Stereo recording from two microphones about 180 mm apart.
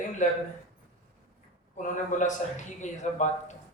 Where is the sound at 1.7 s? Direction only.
45° left (ahead or behind).